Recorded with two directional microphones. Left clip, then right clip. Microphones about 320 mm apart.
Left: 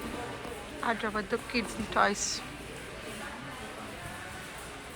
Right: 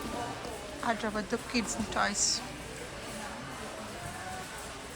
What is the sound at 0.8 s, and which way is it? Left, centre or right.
A woman's voice, centre.